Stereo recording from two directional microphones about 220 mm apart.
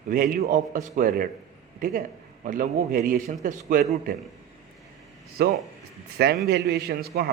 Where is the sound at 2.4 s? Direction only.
40° right (ahead or behind).